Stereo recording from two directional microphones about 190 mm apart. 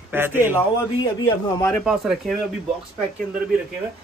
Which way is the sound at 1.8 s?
Centre (ahead or behind).